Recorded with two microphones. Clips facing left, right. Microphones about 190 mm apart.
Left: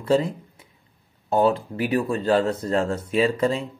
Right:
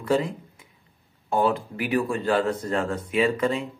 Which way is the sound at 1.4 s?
30° left (ahead or behind).